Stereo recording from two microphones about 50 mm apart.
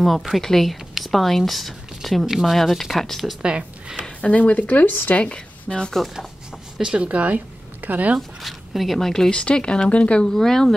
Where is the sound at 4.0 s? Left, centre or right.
Left.